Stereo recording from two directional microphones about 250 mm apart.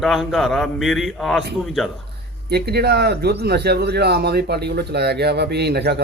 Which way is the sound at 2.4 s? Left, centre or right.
Right.